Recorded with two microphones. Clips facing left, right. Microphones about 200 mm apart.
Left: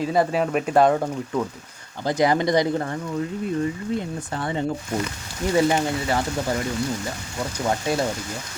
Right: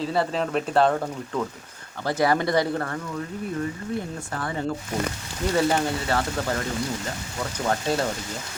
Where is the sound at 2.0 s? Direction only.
15° left (ahead or behind).